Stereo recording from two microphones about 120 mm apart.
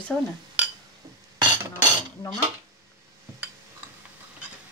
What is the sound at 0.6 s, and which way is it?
Chink, 15° right (ahead or behind).